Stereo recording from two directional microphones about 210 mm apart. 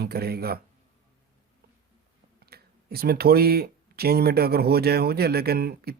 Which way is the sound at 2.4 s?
50° right (ahead or behind).